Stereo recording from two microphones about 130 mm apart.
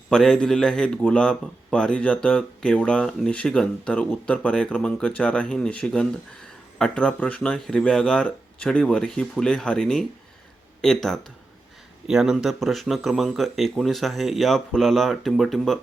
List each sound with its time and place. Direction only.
0.1 s a man's voice: 5° left (ahead or behind)